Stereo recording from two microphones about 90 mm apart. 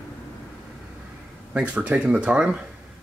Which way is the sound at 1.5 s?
15° right (ahead or behind).